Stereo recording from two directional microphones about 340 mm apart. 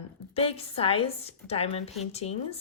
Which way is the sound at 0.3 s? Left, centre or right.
Centre.